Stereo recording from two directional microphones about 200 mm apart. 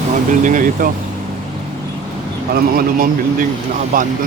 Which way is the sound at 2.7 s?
45° right (ahead or behind).